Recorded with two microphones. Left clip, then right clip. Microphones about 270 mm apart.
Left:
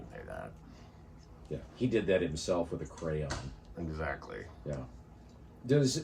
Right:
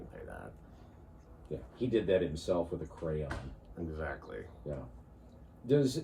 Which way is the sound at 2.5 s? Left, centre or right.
Left.